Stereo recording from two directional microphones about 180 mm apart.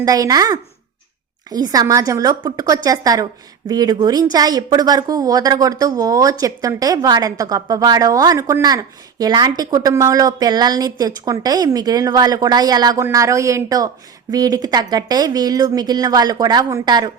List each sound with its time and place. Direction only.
0.0 s speech: 20° right (ahead or behind)